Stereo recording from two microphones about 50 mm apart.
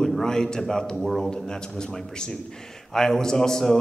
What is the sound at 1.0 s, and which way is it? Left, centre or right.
Speech, centre.